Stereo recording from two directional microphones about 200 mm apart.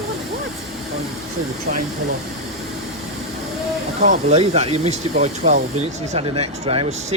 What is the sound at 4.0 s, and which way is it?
Speech, 35° right (ahead or behind).